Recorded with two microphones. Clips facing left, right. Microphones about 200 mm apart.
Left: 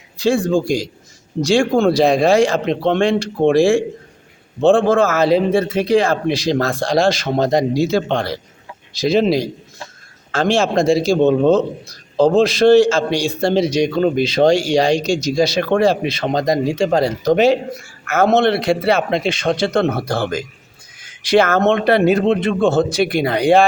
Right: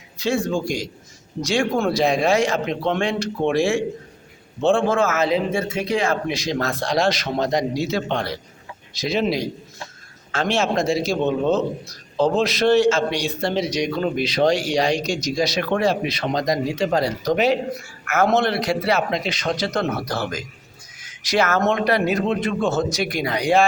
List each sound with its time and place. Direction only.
0.2 s a man's voice: 30° left (ahead or behind)